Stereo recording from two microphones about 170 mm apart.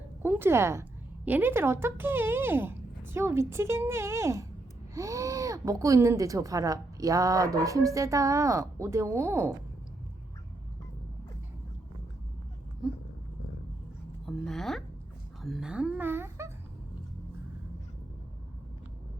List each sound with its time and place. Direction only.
0.2 s a woman's voice: 15° right (ahead or behind)
14.3 s a woman's voice: centre (ahead or behind)
15.4 s a sound: centre (ahead or behind)